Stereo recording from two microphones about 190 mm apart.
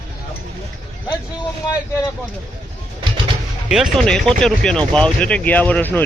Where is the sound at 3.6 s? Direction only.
5° right (ahead or behind).